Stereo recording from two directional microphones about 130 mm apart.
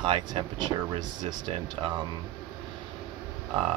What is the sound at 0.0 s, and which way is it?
Speech, 40° right (ahead or behind).